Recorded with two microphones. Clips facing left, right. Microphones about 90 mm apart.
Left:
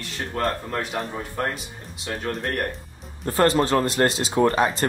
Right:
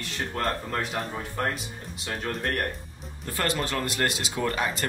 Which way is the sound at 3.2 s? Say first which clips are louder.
Left 9 dB; 35° left (ahead or behind).